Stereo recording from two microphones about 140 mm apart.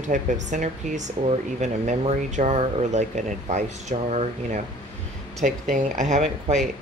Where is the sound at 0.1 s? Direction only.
65° right (ahead or behind).